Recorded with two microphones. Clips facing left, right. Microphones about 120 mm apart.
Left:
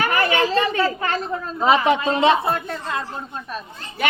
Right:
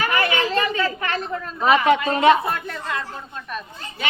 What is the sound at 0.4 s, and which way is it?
Speech, 40° left (ahead or behind).